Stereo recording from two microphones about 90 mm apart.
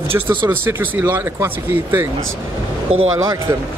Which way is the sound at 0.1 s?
25° right (ahead or behind).